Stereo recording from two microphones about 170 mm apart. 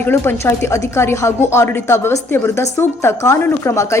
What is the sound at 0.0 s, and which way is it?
A woman's voice, 15° left (ahead or behind).